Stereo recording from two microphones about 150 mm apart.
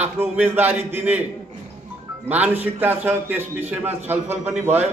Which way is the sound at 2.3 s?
10° right (ahead or behind).